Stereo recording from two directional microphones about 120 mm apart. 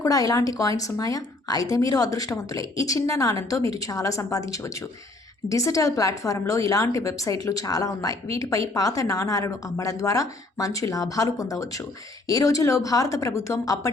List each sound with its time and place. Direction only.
0.0 s a woman's voice: 30° left (ahead or behind)